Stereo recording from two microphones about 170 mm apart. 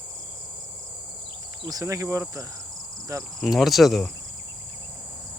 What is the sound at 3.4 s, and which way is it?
Cricket, centre (ahead or behind).